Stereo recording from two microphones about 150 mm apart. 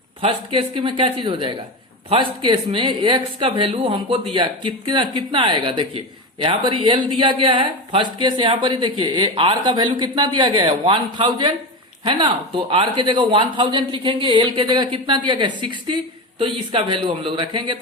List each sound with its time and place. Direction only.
0.2 s speech: 35° right (ahead or behind)